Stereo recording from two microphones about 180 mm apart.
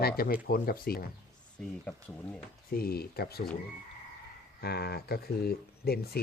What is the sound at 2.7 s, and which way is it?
Speech, 55° left (ahead or behind).